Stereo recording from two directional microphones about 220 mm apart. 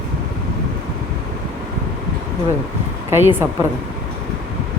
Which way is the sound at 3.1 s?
10° right (ahead or behind).